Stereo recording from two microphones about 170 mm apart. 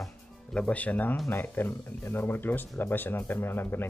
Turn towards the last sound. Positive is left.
turn(degrees=10)  # may be behind; listen again after turning